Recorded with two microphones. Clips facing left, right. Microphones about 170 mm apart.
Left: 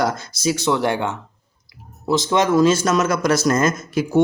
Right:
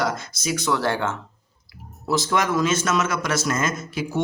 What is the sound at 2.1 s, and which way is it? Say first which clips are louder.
A man's voice: left 5 dB; 20° left (ahead or behind).